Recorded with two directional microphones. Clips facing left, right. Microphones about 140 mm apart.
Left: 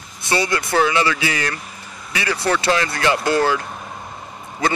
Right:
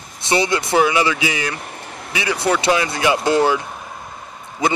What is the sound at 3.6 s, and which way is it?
Vehicle, centre (ahead or behind).